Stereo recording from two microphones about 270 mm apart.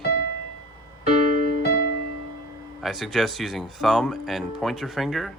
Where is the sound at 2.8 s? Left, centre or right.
Centre.